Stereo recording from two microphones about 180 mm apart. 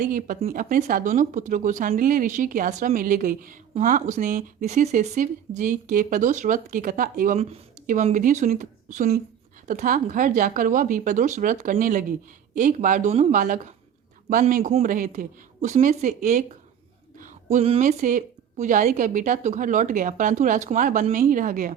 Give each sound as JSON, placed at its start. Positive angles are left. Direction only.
{"t": 0.0, "sound": "speech", "side_deg": -50}
{"t": 17.2, "sound": "a sound", "side_deg": -45}
{"t": 17.7, "sound": "speech", "side_deg": -45}